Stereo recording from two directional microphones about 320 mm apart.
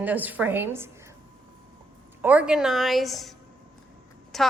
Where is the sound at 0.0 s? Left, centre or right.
Centre.